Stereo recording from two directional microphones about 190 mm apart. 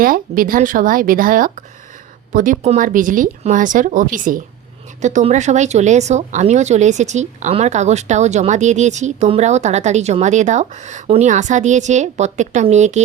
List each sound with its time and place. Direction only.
0.0 s speech: 50° right (ahead or behind)